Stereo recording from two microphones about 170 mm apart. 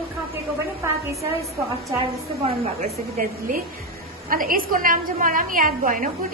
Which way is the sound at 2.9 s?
60° right (ahead or behind).